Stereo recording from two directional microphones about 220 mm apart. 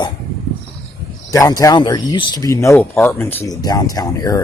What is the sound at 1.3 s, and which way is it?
Speech, 15° left (ahead or behind).